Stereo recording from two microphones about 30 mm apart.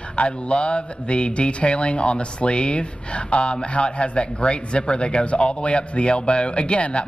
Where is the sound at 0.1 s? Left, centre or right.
Left.